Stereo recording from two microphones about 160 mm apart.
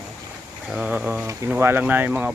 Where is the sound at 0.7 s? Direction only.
5° right (ahead or behind).